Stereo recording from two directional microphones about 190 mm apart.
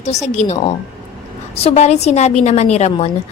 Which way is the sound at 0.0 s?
35° left (ahead or behind).